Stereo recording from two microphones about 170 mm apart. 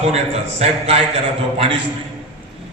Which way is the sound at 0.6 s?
35° right (ahead or behind).